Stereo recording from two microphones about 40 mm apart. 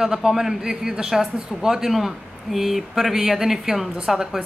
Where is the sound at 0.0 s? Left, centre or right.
Centre.